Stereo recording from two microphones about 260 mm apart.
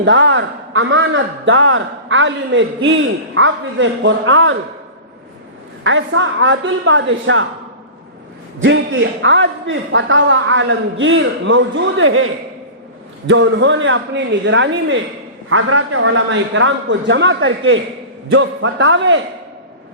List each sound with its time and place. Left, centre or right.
0.0 s a man's voice: right
5.8 s a man's voice: right
8.5 s a man's voice: right